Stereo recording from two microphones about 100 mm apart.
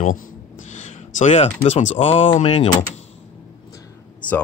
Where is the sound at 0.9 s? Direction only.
90° left.